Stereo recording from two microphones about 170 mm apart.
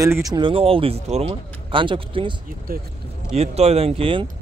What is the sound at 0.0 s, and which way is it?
Speech, 20° right (ahead or behind).